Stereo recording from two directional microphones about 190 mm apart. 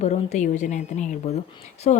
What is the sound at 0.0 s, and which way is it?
A woman's voice, 35° left (ahead or behind).